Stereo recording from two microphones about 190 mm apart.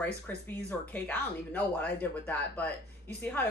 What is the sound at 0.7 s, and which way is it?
Speech, 5° left (ahead or behind).